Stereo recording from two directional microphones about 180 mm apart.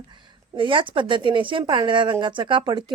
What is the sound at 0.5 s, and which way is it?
Speech, 30° right (ahead or behind).